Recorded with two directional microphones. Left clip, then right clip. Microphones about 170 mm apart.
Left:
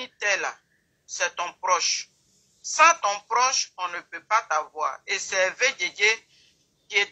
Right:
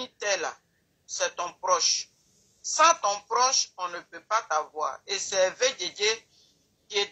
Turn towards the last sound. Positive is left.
turn(degrees=-30)  # may be behind; listen again after turning